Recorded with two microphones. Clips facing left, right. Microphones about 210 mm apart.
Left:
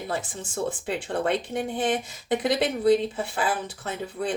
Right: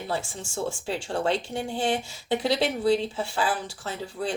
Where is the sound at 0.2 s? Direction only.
20° left (ahead or behind).